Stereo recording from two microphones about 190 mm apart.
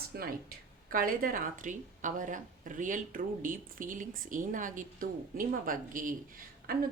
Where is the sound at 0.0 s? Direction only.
55° right (ahead or behind).